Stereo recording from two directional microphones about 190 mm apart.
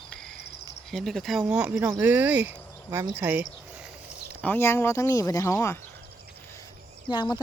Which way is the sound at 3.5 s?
5° right (ahead or behind).